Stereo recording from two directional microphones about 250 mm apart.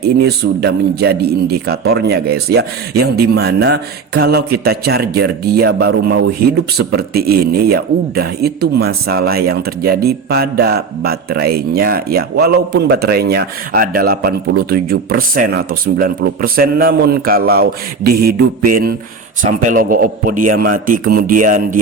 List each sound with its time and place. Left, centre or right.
0.0 s speech: right